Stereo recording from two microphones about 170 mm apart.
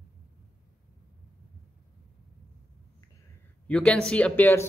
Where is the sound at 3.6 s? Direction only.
5° left (ahead or behind).